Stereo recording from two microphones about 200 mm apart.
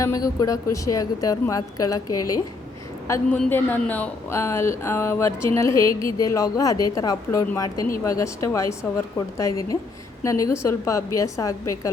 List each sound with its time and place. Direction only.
0.0 s a woman's voice: 15° left (ahead or behind)
3.1 s a woman's voice: 10° left (ahead or behind)